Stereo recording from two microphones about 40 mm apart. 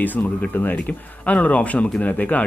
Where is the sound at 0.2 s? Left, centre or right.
Left.